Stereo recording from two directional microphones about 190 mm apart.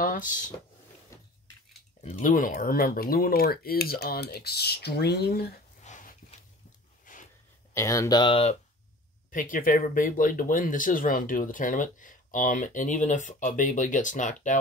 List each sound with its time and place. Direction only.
0.0 s speech: 45° left (ahead or behind)
2.0 s speech: 40° left (ahead or behind); by 5.5 s 55° left (ahead or behind)
5.9 s a sound: 40° left (ahead or behind)
7.7 s speech: 15° left (ahead or behind)
9.3 s speech: 45° left (ahead or behind)